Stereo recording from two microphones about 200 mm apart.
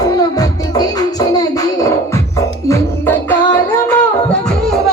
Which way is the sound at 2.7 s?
10° left (ahead or behind).